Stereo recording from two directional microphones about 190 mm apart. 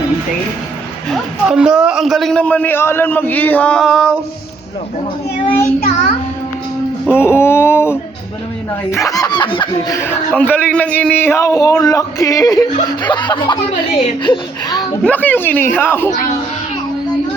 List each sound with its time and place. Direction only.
1.1 s a man's voice: 5° right (ahead or behind)
7.1 s speech: 10° left (ahead or behind)
15.0 s speech: 10° left (ahead or behind)